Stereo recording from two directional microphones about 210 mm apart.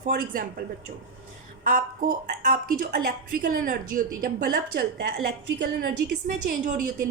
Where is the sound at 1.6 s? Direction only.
40° right (ahead or behind).